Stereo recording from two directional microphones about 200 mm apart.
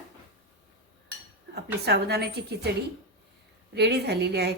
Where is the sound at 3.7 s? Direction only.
55° right (ahead or behind).